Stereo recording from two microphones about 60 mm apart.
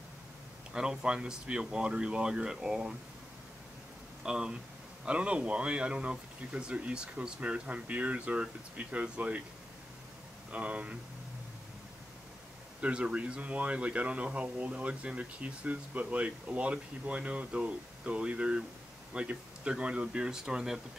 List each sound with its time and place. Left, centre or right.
0.7 s speech: centre
4.2 s speech: centre
10.5 s speech: right
12.8 s speech: centre